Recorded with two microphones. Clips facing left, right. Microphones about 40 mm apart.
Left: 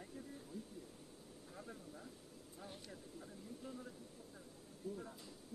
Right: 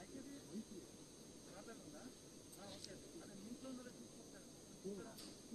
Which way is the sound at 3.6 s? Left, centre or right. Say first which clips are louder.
Left 3 dB; centre.